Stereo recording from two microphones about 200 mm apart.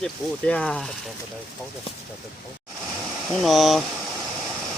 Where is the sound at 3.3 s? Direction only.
Centre (ahead or behind).